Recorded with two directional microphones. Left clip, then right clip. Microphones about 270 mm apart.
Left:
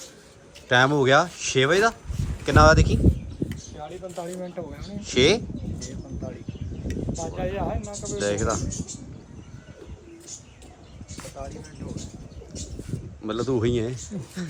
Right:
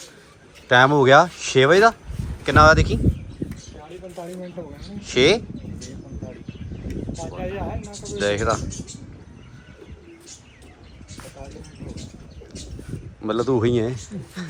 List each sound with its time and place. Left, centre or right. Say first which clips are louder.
0.7 s speech: right 5 dB; centre
3.4 s a sound: left 1 dB; right
4.1 s speech: right 1 dB; centre
7.3 s speech: left 1 dB; centre
13.2 s speech: right 5 dB; centre